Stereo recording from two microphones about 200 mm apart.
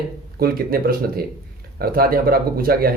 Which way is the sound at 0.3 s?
50° right (ahead or behind).